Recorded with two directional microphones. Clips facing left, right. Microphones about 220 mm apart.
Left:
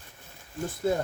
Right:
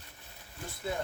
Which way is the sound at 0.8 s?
45° left (ahead or behind).